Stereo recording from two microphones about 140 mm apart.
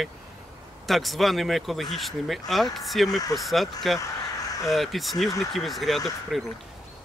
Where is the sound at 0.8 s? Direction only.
Centre (ahead or behind).